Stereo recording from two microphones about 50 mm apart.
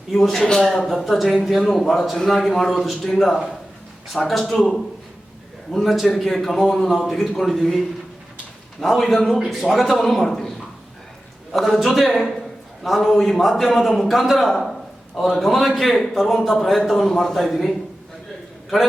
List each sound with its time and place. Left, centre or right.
0.1 s a man's voice: centre
5.7 s a man's voice: centre
11.5 s a man's voice: centre